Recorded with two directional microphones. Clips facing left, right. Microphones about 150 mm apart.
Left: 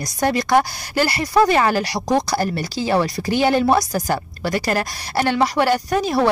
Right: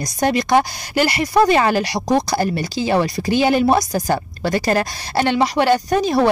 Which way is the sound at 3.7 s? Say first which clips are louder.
Right 1 dB; 25° right (ahead or behind).